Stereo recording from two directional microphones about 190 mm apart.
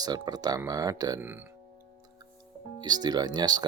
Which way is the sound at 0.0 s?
20° right (ahead or behind).